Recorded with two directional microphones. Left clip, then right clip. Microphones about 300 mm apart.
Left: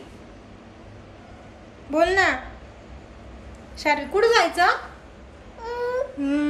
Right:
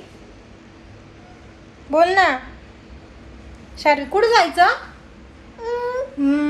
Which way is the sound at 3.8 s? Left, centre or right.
Centre.